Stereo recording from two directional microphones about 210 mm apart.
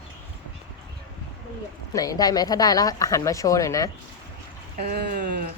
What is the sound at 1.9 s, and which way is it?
A woman's voice, 15° left (ahead or behind).